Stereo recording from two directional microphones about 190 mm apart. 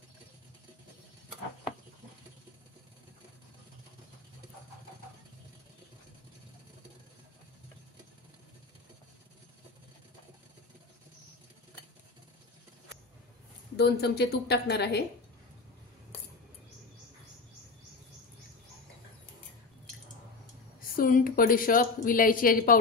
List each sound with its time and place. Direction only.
13.7 s a woman's voice: 60° left (ahead or behind)
20.9 s a woman's voice: 50° left (ahead or behind)